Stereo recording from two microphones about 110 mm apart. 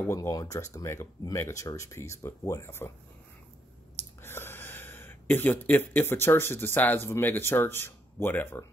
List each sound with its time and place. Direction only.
0.0 s speech: 25° left (ahead or behind)
4.2 s speech: 20° left (ahead or behind)